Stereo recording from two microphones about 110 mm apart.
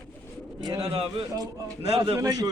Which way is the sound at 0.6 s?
40° right (ahead or behind).